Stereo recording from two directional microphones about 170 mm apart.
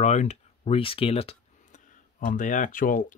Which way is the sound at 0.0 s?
40° left (ahead or behind).